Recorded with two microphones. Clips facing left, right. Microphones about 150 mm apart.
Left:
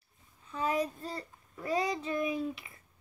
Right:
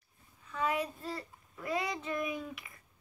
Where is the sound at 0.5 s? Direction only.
35° left (ahead or behind).